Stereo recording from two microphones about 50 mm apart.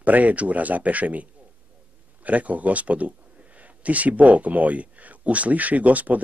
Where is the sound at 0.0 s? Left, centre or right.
Right.